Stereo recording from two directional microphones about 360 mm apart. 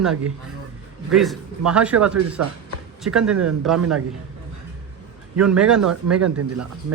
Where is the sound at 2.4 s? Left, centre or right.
Right.